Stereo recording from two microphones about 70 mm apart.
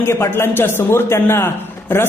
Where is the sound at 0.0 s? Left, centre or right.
Left.